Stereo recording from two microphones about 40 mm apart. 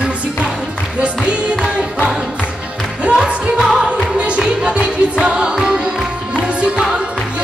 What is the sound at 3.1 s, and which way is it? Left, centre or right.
Music, centre.